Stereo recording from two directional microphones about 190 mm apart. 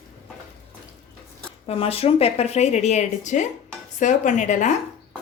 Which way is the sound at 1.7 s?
30° left (ahead or behind).